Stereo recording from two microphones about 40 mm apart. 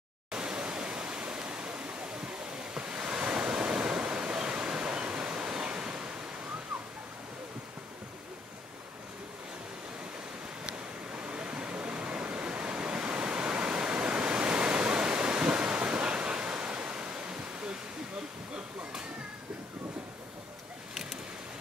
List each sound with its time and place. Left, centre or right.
0.3 s pink noise: right
1.3 s waves: right
10.6 s a sound: right
17.1 s waterfall: right